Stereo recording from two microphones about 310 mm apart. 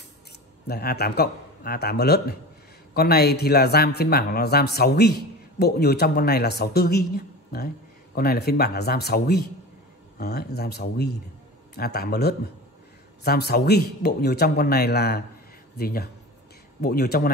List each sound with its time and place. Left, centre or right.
0.7 s a man's voice: left